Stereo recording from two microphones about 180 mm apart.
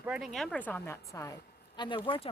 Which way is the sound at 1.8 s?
25° left (ahead or behind).